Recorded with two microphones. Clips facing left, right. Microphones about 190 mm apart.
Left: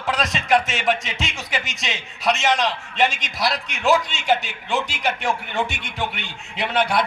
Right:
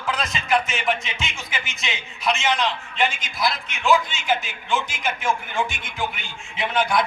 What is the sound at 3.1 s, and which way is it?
A man's voice, 80° left.